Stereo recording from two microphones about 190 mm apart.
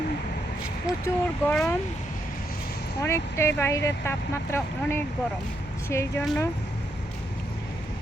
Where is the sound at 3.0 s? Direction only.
15° left (ahead or behind).